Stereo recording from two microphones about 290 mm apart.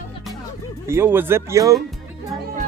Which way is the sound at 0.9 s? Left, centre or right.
Centre.